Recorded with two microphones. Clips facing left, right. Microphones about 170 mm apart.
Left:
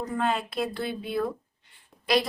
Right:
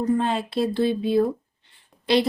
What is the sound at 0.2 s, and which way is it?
A woman's voice, 30° right (ahead or behind).